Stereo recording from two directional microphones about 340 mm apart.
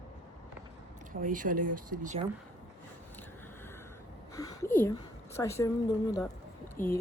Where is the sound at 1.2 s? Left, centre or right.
Right.